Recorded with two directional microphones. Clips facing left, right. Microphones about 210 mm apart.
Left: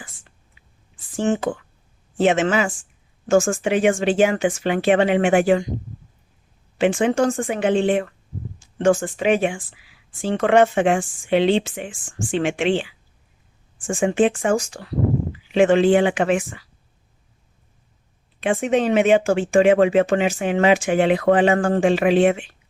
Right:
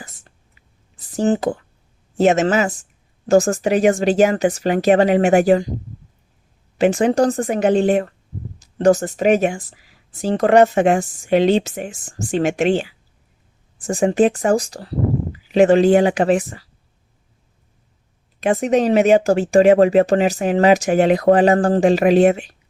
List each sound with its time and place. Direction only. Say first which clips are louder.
0.6 s a sound: even; 40° right (ahead or behind)
0.9 s speech: right 3 dB; 40° right (ahead or behind)
6.7 s speech: right 3 dB; 40° right (ahead or behind)
18.3 s speech: right 3 dB; 40° right (ahead or behind)